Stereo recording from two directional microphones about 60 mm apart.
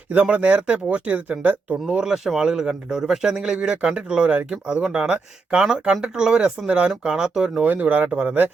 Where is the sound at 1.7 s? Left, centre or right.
Centre.